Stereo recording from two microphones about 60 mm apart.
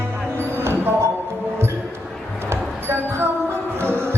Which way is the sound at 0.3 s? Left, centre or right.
Right.